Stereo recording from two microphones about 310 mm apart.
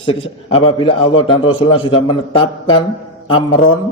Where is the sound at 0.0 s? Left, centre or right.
Centre.